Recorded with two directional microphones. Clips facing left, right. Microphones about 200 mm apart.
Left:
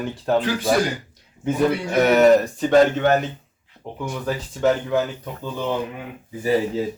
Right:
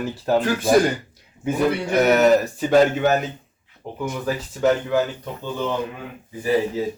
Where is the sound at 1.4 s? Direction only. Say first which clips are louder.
Even; 5° right (ahead or behind).